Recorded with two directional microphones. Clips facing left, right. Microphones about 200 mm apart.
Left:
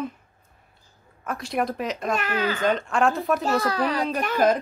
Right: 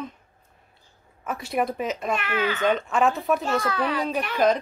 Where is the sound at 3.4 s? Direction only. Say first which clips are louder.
Left 2 dB; 40° left (ahead or behind).